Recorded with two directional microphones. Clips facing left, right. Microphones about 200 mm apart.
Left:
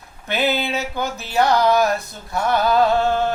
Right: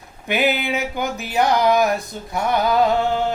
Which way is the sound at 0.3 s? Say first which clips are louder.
Right 1 dB; 15° right (ahead or behind).